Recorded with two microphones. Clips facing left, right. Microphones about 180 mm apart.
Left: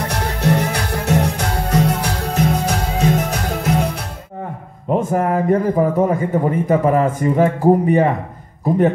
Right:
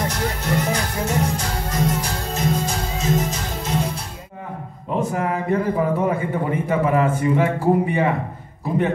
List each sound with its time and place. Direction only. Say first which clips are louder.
0.1 s music: left 4 dB; 65° left (ahead or behind)
5.1 s a man's voice: left 7 dB; 45° left (ahead or behind)